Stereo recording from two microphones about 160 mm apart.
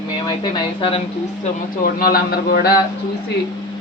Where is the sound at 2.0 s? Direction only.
75° left (ahead or behind).